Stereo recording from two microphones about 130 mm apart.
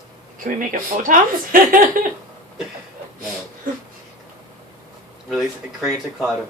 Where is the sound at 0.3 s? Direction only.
90° right.